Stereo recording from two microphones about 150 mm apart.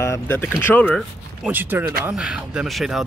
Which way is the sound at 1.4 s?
15° right (ahead or behind).